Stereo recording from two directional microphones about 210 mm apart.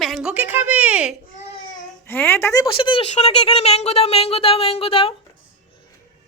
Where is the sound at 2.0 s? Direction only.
10° left (ahead or behind); by 5.1 s 25° left (ahead or behind).